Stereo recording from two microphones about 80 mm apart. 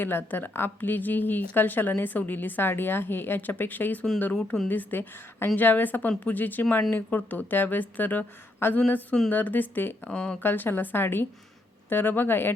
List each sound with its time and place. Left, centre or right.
0.0 s a woman's voice: left
4.4 s a woman's voice: centre
4.7 s a woman's voice: left